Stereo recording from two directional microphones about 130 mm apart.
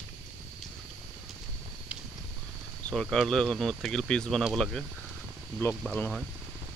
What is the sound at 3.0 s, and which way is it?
Speech, 5° left (ahead or behind).